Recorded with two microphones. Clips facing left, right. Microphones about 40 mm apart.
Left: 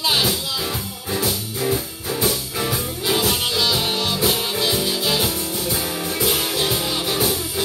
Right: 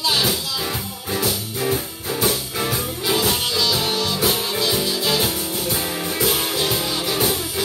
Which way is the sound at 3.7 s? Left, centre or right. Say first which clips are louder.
Even; centre.